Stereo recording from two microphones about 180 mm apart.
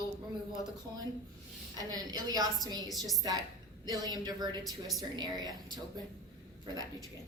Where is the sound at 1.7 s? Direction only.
20° right (ahead or behind).